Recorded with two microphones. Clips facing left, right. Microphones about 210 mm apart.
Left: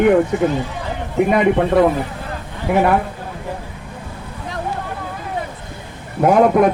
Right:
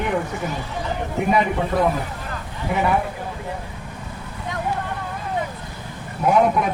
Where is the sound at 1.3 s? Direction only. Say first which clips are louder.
Left 5 dB; 65° left (ahead or behind).